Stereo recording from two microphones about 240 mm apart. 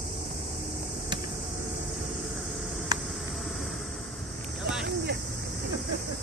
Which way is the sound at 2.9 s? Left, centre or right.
Centre.